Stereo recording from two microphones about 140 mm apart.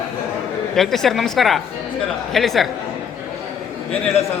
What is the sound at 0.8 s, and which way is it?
A woman's voice, 5° left (ahead or behind).